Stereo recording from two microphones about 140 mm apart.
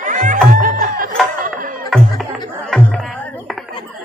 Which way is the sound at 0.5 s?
75° right (ahead or behind).